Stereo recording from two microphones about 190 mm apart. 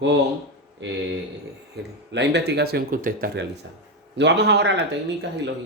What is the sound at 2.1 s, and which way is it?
Speech, 65° right (ahead or behind).